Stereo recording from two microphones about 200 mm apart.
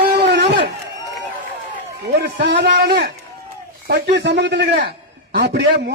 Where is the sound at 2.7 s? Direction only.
50° right (ahead or behind).